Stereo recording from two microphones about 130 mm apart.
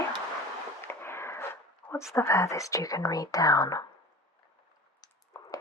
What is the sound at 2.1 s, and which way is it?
Speech, 20° left (ahead or behind).